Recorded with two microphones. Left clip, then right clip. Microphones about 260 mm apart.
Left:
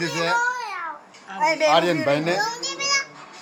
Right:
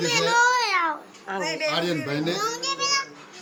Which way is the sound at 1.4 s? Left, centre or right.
Left.